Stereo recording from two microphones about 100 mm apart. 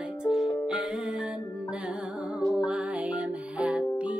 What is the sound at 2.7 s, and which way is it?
Music, 10° right (ahead or behind).